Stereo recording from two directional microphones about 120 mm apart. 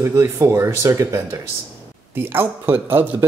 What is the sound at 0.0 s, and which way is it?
Speech, 25° right (ahead or behind).